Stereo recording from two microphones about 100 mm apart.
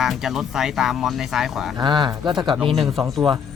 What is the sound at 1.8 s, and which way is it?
Speech, 50° right (ahead or behind).